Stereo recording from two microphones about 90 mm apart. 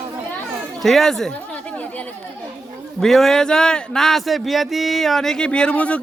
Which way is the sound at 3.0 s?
5° left (ahead or behind).